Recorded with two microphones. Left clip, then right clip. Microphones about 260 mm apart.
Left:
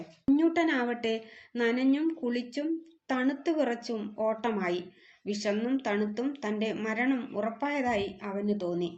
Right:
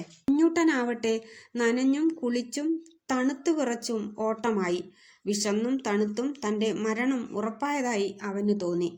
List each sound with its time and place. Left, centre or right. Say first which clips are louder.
0.3 s speech: right 3 dB; right